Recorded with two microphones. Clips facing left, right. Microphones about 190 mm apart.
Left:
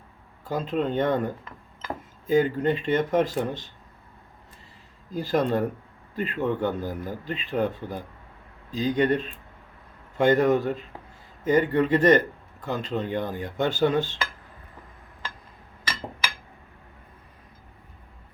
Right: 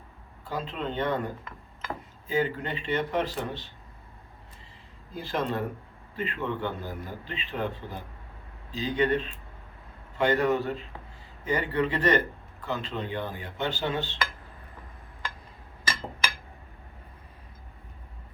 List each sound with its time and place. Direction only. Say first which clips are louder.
0.4 s a man's voice: left 7 dB; 45° left (ahead or behind)
2.2 s a man's voice: left 7 dB; 45° left (ahead or behind)
5.1 s a man's voice: left 6 dB; 40° left (ahead or behind)